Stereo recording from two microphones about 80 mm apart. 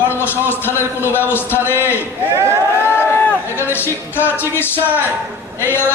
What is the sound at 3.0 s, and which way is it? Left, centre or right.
Speech, left.